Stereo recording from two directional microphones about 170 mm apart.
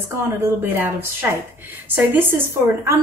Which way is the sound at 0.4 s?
15° right (ahead or behind).